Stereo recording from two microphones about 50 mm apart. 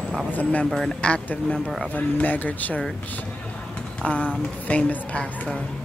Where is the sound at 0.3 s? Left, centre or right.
Left.